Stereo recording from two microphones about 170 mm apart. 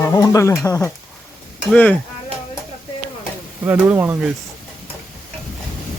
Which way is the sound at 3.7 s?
10° right (ahead or behind).